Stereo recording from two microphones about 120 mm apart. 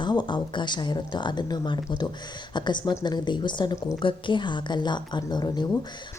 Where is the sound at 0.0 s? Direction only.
40° left (ahead or behind).